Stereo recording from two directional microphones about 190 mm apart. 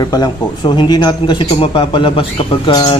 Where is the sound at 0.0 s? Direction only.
20° left (ahead or behind).